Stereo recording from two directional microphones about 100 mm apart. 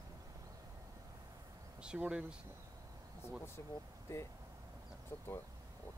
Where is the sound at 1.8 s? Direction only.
10° right (ahead or behind).